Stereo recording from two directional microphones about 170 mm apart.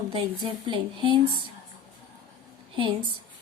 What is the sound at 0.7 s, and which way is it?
Speech, 30° right (ahead or behind).